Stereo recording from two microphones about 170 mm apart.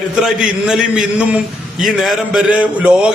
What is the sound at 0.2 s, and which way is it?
A man's voice, 5° right (ahead or behind).